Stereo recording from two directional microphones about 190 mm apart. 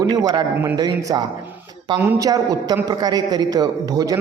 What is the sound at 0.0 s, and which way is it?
A man's voice, 20° right (ahead or behind).